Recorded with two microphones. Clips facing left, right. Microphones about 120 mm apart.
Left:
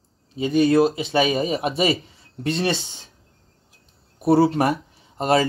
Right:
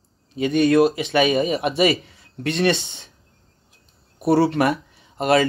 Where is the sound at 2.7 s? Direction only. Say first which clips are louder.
Right 3 dB; 70° right (ahead or behind).